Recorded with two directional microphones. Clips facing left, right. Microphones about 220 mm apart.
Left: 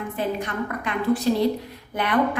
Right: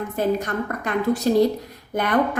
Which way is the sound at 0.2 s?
45° right (ahead or behind).